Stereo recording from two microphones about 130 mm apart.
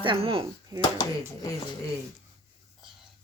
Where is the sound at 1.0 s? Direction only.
25° left (ahead or behind).